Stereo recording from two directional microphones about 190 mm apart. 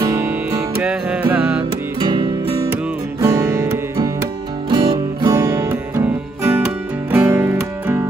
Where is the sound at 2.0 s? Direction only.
20° right (ahead or behind).